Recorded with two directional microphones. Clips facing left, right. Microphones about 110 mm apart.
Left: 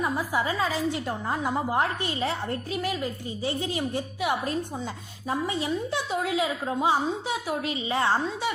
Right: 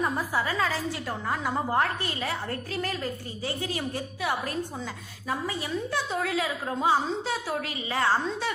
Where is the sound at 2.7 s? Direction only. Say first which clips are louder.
Left 1 dB; 15° left (ahead or behind).